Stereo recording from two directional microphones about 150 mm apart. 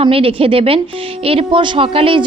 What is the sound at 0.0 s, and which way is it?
A man's voice, 40° right (ahead or behind).